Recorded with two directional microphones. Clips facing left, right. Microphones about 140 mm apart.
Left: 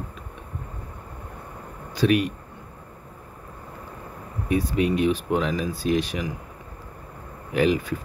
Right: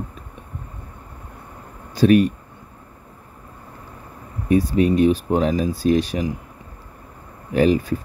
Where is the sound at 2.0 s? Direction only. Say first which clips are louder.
Right 6 dB; 40° right (ahead or behind).